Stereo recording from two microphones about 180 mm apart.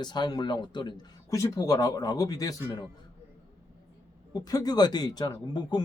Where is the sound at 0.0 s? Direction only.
25° left (ahead or behind).